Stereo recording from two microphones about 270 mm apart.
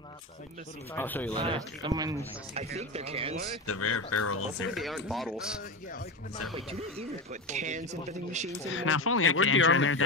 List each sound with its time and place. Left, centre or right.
0.9 s speech: centre
1.3 s speech: centre
3.6 s speech: left
4.7 s speech: centre
6.5 s speech: right
8.6 s speech: left